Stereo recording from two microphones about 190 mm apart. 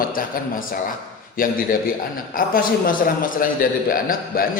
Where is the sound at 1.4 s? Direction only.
45° left (ahead or behind).